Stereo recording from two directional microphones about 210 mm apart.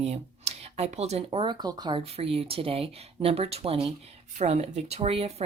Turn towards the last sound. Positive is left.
turn(degrees=-30)  # may be behind; listen again after turning